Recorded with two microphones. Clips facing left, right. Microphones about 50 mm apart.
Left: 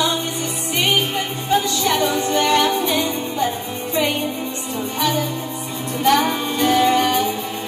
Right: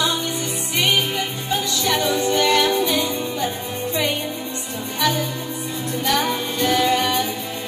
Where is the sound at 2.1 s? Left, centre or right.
Left.